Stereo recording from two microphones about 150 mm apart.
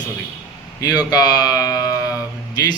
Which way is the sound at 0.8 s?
25° left (ahead or behind).